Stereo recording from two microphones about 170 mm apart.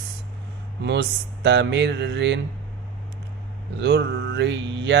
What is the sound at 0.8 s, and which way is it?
Speech, 80° right.